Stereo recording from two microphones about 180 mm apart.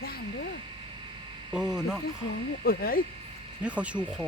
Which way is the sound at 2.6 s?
55° left (ahead or behind).